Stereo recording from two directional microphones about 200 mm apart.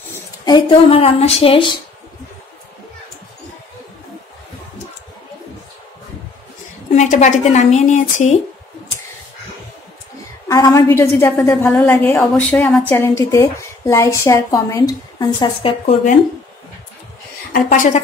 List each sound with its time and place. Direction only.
0.5 s speech: 25° left (ahead or behind)
6.9 s a woman's voice: 35° left (ahead or behind)
10.5 s a woman's voice: 20° left (ahead or behind)
17.5 s a woman's voice: 40° left (ahead or behind)